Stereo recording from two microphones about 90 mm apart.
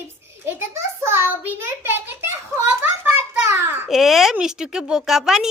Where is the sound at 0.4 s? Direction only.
25° right (ahead or behind).